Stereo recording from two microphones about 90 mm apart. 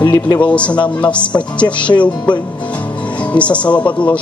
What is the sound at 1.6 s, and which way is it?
Music, 45° left (ahead or behind).